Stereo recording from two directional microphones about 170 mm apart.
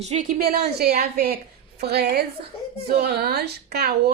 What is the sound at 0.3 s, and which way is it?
A woman's voice, 65° right (ahead or behind).